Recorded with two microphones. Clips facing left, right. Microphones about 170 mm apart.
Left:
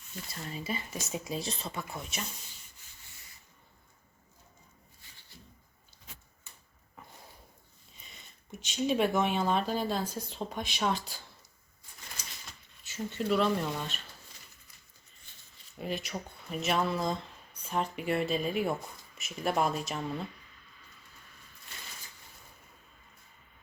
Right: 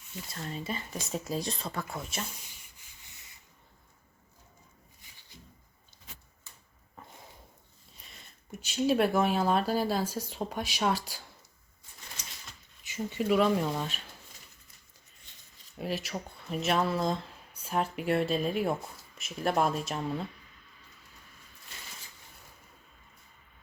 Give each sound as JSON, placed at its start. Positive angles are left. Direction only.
{"t": 0.5, "sound": "speech", "side_deg": 5}
{"t": 4.9, "sound": "a sound", "side_deg": -15}
{"t": 7.9, "sound": "speech", "side_deg": 0}
{"t": 12.9, "sound": "speech", "side_deg": -10}
{"t": 15.8, "sound": "speech", "side_deg": 0}